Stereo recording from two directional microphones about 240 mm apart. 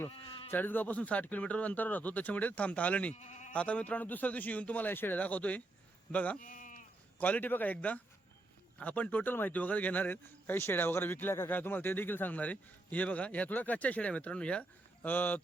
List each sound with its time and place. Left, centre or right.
0.3 s sheep: left
0.5 s a man's voice: centre
3.2 s speech: left
3.5 s a man's voice: centre
6.4 s sheep: left
7.2 s a man's voice: centre